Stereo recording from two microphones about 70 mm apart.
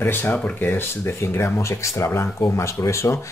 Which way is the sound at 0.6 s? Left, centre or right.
Left.